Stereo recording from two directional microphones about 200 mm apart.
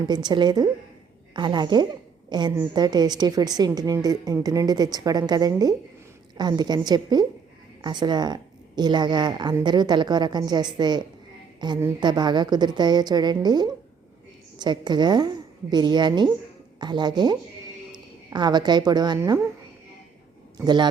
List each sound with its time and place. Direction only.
0.0 s a woman's voice: 20° right (ahead or behind)
20.6 s a woman's voice: 20° right (ahead or behind)